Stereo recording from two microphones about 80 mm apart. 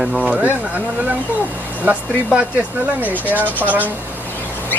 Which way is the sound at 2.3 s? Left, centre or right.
Centre.